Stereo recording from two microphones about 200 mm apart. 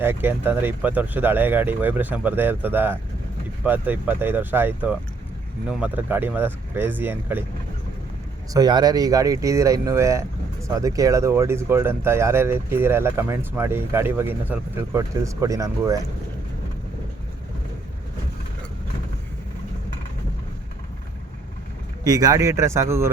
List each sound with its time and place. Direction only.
0.0 s speech: 10° right (ahead or behind)
8.5 s speech: 20° right (ahead or behind)
22.0 s speech: 20° right (ahead or behind)